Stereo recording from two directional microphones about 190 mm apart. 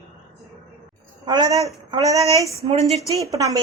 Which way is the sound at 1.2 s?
20° right (ahead or behind).